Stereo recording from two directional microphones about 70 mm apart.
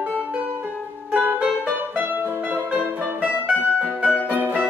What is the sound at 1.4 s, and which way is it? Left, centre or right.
Music, centre.